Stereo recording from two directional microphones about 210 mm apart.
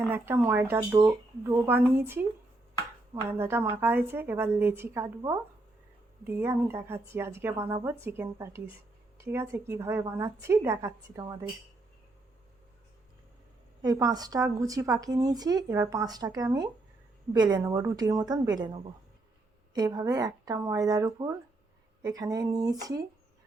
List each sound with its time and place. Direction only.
0.0 s speech: 10° right (ahead or behind)
3.2 s speech: 10° right (ahead or behind)
13.8 s a woman's voice: 20° right (ahead or behind)